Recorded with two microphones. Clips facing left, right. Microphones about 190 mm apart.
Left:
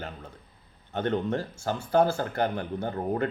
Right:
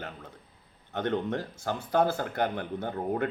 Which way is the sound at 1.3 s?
20° right (ahead or behind).